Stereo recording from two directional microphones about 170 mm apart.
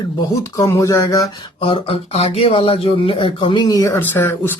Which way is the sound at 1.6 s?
35° left (ahead or behind).